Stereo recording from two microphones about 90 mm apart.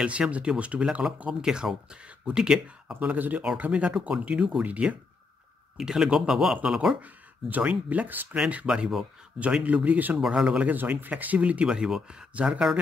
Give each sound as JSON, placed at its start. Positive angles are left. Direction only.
{"t": 0.0, "sound": "speech", "side_deg": -15}
{"t": 7.0, "sound": "speech", "side_deg": -20}